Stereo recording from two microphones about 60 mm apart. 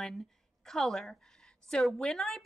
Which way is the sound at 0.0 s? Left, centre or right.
Centre.